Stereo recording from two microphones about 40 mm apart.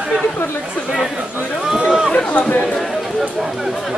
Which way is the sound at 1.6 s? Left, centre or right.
Centre.